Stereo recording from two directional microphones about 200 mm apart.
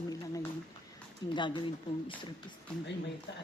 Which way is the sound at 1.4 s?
25° left (ahead or behind).